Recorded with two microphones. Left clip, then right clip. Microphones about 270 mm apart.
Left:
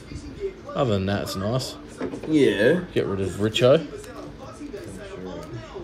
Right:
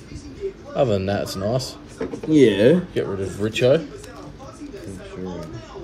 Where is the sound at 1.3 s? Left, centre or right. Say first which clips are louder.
Right 3 dB; left.